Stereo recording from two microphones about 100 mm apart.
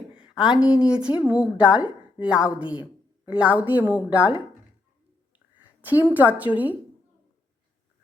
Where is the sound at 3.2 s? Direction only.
15° right (ahead or behind).